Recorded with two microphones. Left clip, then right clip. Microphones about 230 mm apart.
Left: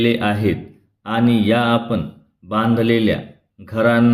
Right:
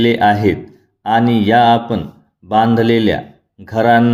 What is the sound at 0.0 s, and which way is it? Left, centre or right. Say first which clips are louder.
A man's voice: right 6 dB; right.